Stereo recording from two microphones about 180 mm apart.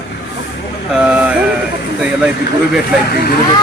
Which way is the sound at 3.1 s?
55° left (ahead or behind).